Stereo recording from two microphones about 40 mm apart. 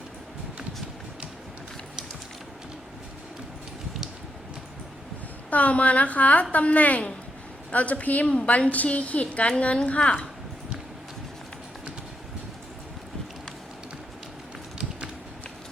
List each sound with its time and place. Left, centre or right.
5.5 s a woman's voice: left